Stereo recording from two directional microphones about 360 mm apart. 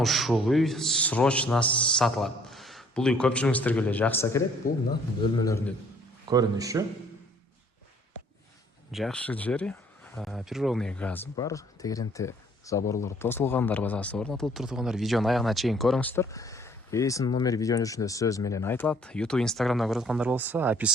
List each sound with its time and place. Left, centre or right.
0.0 s speech: centre
4.6 s a man's voice: left
5.4 s a man's voice: centre
6.2 s speech: centre
8.9 s speech: centre